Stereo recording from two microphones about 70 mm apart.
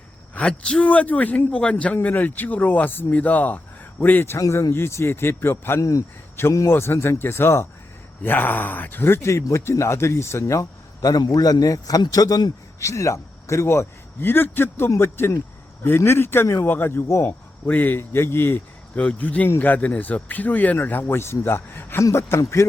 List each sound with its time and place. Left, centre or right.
0.3 s speech: centre
4.4 s speech: left
4.7 s a man's voice: left
5.8 s speech: left
6.7 s a man's voice: left
12.8 s a man's voice: left
17.2 s a man's voice: left
18.9 s speech: centre
22.0 s a man's voice: left